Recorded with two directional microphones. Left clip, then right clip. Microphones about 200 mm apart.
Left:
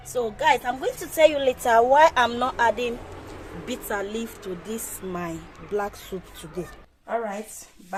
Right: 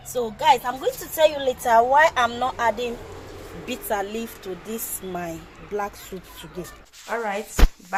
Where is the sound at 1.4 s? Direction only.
15° left (ahead or behind).